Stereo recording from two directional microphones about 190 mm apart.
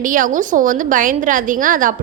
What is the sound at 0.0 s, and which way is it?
A woman's voice, 45° right (ahead or behind).